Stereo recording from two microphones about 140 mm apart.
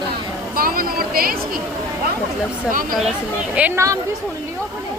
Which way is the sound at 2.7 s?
80° right.